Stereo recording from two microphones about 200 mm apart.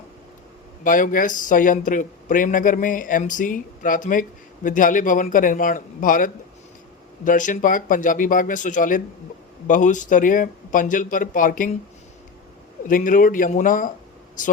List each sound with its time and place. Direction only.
0.9 s speech: 45° left (ahead or behind)
12.9 s speech: 45° left (ahead or behind)